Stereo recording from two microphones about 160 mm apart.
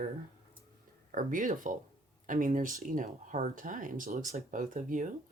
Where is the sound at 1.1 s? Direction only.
55° right (ahead or behind).